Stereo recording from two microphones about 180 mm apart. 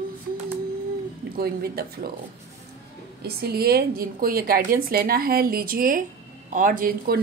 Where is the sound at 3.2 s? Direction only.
60° right (ahead or behind).